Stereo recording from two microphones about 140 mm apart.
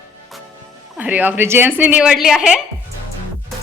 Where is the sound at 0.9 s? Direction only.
10° right (ahead or behind).